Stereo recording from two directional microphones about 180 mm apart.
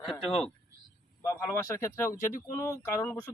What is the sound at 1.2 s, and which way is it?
Speech, 15° left (ahead or behind).